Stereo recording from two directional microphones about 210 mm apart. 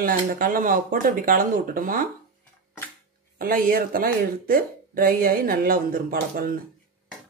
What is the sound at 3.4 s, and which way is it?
Speech, 45° right (ahead or behind).